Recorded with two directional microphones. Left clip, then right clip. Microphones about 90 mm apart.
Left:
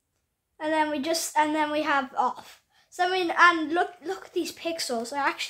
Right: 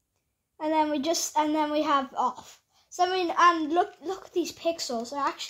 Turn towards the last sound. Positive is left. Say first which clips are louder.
# left 2 dB
turn(degrees=0)  # may be behind; listen again after turning